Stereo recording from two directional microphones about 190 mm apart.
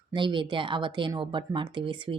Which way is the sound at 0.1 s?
25° right (ahead or behind).